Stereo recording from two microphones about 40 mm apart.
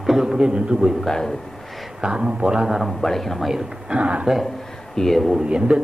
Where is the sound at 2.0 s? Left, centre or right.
Right.